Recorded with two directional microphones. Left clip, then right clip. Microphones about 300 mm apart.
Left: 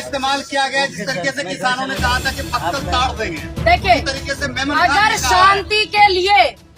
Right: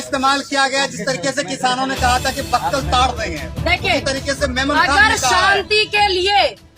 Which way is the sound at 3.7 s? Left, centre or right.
Centre.